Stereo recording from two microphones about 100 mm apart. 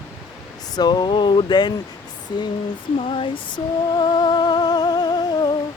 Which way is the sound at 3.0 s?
65° left (ahead or behind).